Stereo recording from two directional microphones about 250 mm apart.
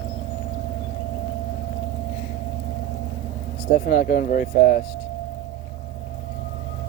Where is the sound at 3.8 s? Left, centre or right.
Left.